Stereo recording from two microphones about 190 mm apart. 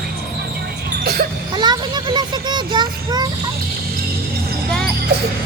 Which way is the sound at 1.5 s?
20° right (ahead or behind).